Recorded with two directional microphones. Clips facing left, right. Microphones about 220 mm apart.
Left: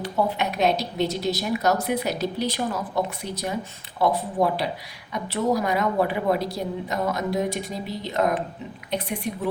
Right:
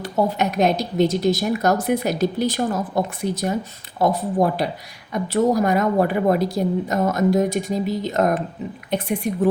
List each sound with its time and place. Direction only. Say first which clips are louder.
0.0 s speech: right 4 dB; 45° right (ahead or behind)